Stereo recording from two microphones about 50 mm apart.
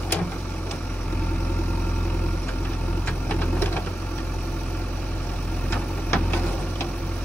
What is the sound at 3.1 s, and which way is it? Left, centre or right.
Vehicle, left.